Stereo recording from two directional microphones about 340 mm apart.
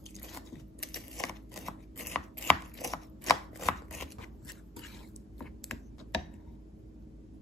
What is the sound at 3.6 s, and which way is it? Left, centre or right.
Chopping, centre.